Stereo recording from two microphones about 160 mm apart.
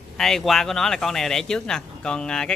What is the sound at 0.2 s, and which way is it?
Speech, centre (ahead or behind).